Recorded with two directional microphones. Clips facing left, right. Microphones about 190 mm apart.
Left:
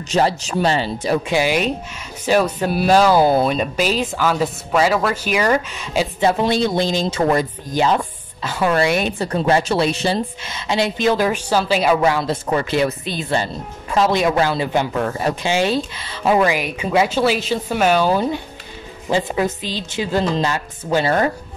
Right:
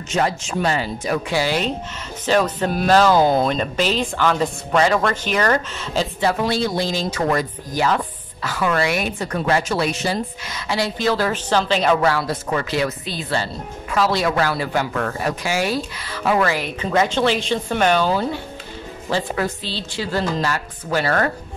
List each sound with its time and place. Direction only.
0.1 s speech: 35° left (ahead or behind)
1.4 s speech: 15° left (ahead or behind)
6.2 s speech: 20° left (ahead or behind)